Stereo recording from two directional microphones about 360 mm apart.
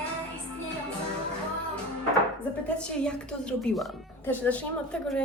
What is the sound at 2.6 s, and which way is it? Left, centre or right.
A woman's voice, centre.